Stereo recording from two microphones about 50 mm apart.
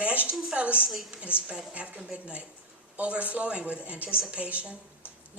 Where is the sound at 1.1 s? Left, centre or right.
Right.